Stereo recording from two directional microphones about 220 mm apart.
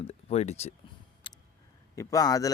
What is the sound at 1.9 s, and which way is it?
Speech, 15° left (ahead or behind).